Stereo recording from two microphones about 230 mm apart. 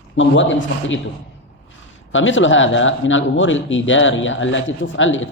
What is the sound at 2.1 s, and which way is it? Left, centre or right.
Speech, left.